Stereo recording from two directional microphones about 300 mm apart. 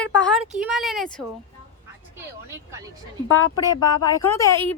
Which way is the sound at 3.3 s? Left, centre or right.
Left.